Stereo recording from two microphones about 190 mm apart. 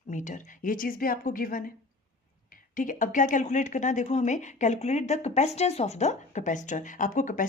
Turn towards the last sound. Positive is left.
turn(degrees=45)  # may be behind; listen again after turning